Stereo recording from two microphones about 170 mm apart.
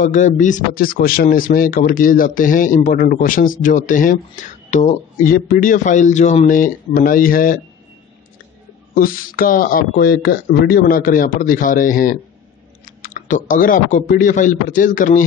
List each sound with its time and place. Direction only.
0.0 s speech: 45° left (ahead or behind)
8.9 s speech: 55° left (ahead or behind)
10.8 s speech: 55° left (ahead or behind)